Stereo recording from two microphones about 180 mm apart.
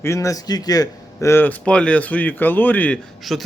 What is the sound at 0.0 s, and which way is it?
Speech, 15° left (ahead or behind).